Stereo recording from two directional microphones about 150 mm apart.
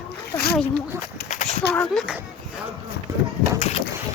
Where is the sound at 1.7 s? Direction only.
5° left (ahead or behind).